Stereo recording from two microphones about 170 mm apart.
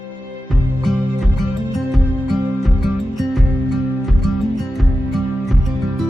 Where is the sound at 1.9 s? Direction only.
Centre (ahead or behind).